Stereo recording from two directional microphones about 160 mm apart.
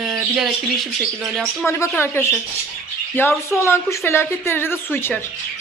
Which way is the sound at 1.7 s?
15° left (ahead or behind).